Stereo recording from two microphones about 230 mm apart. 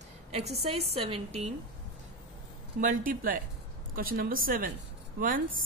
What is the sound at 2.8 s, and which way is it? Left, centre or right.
A woman's voice, right.